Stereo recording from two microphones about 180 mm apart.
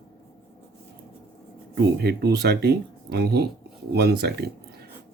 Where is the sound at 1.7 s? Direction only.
65° right (ahead or behind).